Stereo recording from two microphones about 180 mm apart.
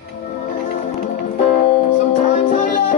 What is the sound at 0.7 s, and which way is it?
Music, 35° left (ahead or behind).